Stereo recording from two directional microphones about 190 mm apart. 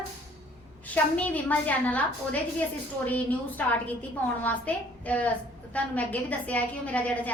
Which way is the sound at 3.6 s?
10° left (ahead or behind).